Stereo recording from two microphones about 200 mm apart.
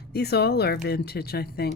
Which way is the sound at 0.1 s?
55° left (ahead or behind).